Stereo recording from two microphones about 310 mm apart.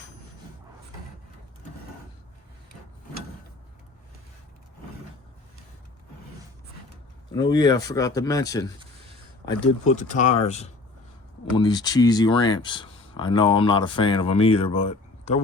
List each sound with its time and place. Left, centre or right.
7.3 s speech: centre
9.5 s speech: left